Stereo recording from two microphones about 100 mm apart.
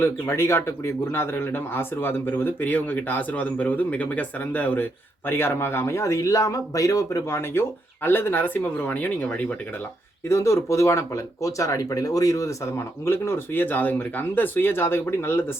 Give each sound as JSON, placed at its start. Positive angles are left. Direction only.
{"t": 0.0, "sound": "speech", "side_deg": 25}
{"t": 10.2, "sound": "speech", "side_deg": 30}